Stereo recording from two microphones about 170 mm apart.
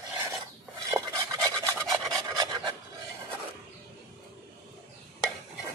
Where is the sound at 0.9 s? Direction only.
20° right (ahead or behind).